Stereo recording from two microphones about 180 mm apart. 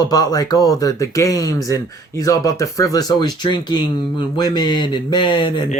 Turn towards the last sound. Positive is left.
turn(degrees=25)  # may be behind; listen again after turning